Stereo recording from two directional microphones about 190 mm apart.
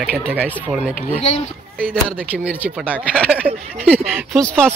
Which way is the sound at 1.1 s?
35° left (ahead or behind).